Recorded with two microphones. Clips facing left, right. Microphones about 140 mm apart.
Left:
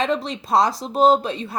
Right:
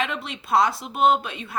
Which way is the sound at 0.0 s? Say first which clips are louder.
Left 6 dB; 35° left (ahead or behind).